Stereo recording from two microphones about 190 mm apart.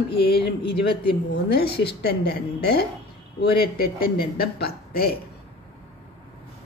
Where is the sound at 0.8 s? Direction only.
55° left (ahead or behind).